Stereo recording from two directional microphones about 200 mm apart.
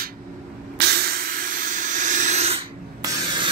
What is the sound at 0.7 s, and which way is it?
Hiss, 55° right (ahead or behind).